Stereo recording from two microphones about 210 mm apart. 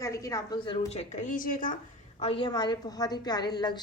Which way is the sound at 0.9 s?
35° left (ahead or behind).